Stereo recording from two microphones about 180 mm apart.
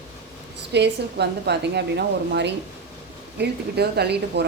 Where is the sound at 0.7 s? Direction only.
70° right (ahead or behind).